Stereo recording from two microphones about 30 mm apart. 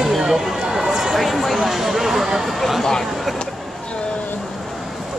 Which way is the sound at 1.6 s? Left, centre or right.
Centre.